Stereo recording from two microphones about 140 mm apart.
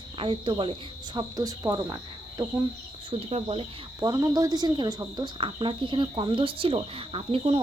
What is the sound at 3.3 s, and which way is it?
Speech, 45° right (ahead or behind).